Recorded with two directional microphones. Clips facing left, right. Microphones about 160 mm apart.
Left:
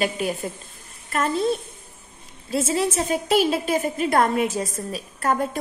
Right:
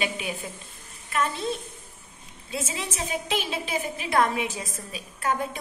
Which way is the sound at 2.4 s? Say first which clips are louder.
Left 10 dB; 45° left (ahead or behind).